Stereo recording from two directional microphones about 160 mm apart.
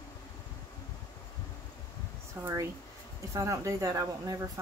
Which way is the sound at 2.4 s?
15° right (ahead or behind).